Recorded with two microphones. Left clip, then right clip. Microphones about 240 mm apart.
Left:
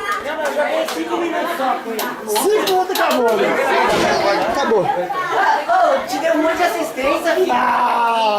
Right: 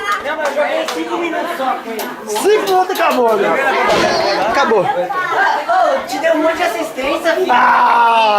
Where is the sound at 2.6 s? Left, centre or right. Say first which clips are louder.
Right 3 dB; centre.